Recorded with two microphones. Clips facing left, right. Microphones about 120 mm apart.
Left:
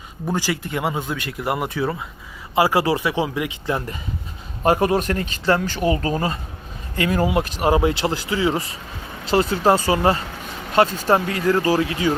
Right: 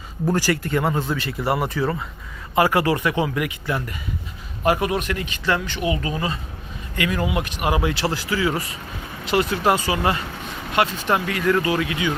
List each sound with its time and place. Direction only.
0.3 s speech: 15° left (ahead or behind)
2.6 s speech: 15° left (ahead or behind); by 12.1 s 35° left (ahead or behind)